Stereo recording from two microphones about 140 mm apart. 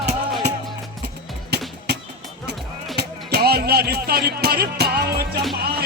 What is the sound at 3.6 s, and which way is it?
Music, 90° right.